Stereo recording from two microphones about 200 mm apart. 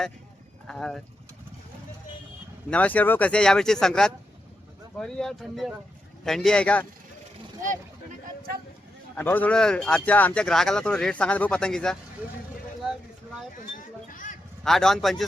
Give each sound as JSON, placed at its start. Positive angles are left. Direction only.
{"t": 0.7, "sound": "speech", "side_deg": 0}
{"t": 2.6, "sound": "speech", "side_deg": 5}
{"t": 9.1, "sound": "speech", "side_deg": 10}
{"t": 13.7, "sound": "a sound", "side_deg": 40}
{"t": 14.6, "sound": "speech", "side_deg": 0}